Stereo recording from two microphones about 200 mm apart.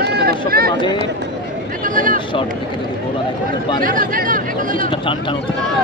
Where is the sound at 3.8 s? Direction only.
45° right (ahead or behind).